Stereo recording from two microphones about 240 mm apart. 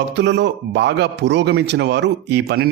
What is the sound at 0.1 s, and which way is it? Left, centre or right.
A man's voice, right.